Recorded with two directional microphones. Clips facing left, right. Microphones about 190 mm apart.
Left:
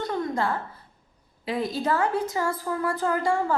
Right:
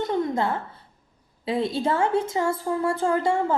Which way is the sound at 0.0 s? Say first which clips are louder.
Right 3 dB; 20° right (ahead or behind).